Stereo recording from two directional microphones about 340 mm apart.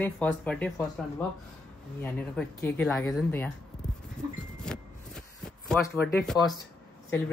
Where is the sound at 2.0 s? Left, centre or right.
Centre.